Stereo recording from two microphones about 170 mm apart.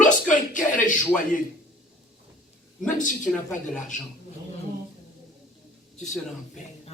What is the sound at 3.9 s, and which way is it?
Speech, 45° left (ahead or behind).